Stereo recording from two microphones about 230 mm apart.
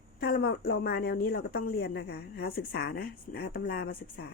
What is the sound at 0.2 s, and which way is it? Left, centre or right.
Speech, left.